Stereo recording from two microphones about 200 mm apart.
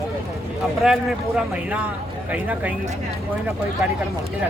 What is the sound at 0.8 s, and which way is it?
Speech, 5° right (ahead or behind).